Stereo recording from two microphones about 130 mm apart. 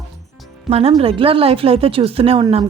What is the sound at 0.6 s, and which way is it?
A woman's voice, 55° right (ahead or behind).